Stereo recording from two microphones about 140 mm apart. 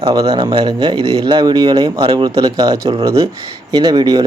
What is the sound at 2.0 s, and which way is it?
Speech, 40° right (ahead or behind).